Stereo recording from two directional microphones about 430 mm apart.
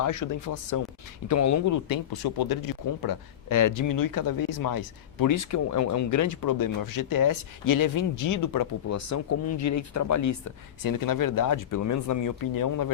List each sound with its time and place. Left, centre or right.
0.0 s speech: left
2.2 s speech: left